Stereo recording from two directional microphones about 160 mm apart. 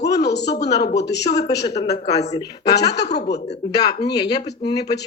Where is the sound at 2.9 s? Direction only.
90° left.